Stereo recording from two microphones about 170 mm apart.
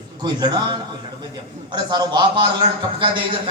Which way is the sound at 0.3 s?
25° right (ahead or behind).